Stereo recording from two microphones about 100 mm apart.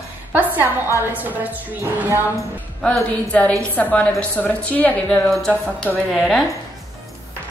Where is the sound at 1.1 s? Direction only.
15° right (ahead or behind).